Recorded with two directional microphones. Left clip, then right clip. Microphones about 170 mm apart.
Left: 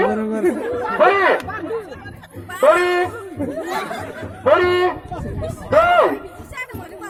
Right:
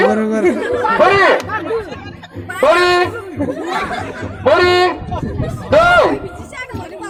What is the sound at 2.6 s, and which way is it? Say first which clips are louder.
Speech: right 3 dB; 20° right (ahead or behind).